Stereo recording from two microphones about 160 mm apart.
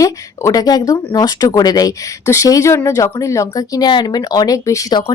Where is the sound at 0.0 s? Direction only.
20° left (ahead or behind).